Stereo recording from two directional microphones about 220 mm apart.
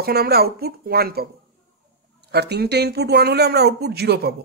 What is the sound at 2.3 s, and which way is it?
Speech, 50° right (ahead or behind).